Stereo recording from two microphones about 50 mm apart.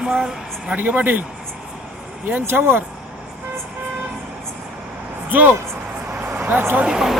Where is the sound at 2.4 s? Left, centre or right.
Right.